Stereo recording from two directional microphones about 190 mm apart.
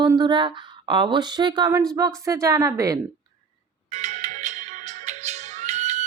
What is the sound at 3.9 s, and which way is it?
Music, 35° right (ahead or behind).